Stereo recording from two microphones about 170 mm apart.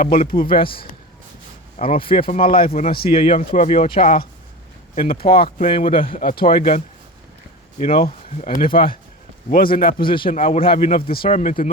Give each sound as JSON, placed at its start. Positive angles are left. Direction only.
{"t": 0.0, "sound": "speech", "side_deg": 60}
{"t": 0.5, "sound": "speech", "side_deg": 30}
{"t": 4.9, "sound": "speech", "side_deg": 60}
{"t": 5.6, "sound": "speech", "side_deg": 30}
{"t": 7.9, "sound": "speech", "side_deg": 35}
{"t": 8.5, "sound": "speech", "side_deg": 55}
{"t": 10.0, "sound": "a man's voice", "side_deg": 30}
{"t": 11.3, "sound": "speech", "side_deg": 45}